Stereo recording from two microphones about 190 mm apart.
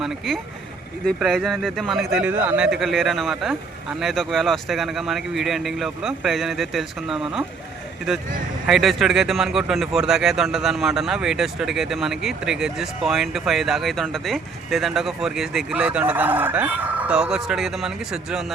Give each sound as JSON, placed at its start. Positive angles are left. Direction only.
{"t": 0.3, "sound": "speech", "side_deg": 0}
{"t": 8.6, "sound": "speech", "side_deg": 0}